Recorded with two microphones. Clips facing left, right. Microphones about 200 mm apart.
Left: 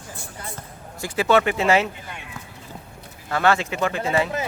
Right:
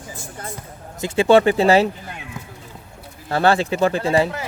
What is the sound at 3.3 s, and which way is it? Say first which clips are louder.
Speech: right 3 dB; 30° right (ahead or behind).